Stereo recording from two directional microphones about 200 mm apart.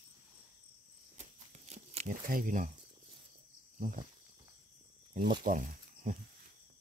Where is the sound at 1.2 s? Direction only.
35° right (ahead or behind).